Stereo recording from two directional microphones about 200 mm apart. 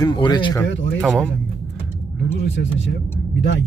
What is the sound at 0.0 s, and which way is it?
Speech, 20° left (ahead or behind).